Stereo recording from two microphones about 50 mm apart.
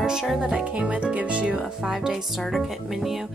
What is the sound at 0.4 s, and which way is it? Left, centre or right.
Speech, centre.